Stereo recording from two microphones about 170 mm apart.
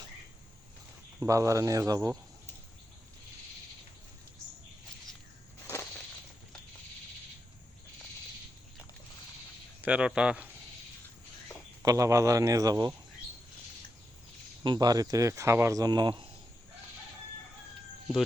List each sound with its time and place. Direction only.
1.2 s speech: 20° right (ahead or behind)
5.6 s a sound: 15° left (ahead or behind)
9.8 s speech: 5° right (ahead or behind)
11.8 s speech: 20° right (ahead or behind)
14.6 s speech: 25° right (ahead or behind)